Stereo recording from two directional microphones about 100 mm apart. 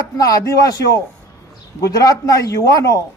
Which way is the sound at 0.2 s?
40° left (ahead or behind).